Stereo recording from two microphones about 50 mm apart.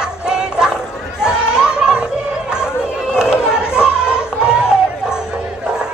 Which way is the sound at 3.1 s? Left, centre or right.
Centre.